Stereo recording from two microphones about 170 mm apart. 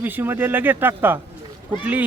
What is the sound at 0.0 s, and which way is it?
Speech, 10° right (ahead or behind).